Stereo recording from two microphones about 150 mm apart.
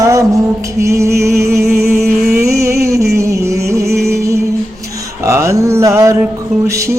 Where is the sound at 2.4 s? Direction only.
20° right (ahead or behind).